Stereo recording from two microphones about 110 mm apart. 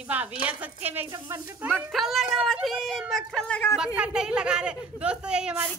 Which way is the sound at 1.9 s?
Centre (ahead or behind).